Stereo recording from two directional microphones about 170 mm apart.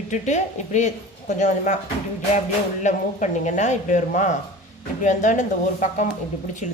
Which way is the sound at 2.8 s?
45° left (ahead or behind).